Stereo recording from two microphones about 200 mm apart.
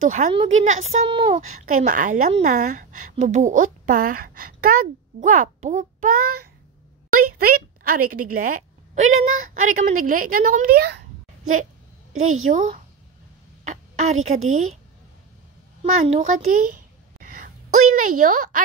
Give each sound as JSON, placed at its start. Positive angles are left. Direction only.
{"t": 0.3, "sound": "a woman's voice", "side_deg": -30}
{"t": 1.7, "sound": "a woman's voice", "side_deg": -40}
{"t": 12.1, "sound": "a woman's voice", "side_deg": -40}
{"t": 15.8, "sound": "a sound", "side_deg": -35}
{"t": 17.9, "sound": "a woman's voice", "side_deg": -40}